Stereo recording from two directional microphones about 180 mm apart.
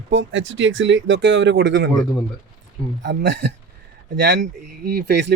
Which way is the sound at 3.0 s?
75° right (ahead or behind).